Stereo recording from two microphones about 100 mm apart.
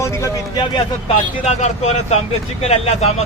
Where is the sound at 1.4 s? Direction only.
90° left.